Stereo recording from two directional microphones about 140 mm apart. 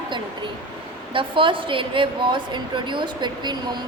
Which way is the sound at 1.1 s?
35° right (ahead or behind).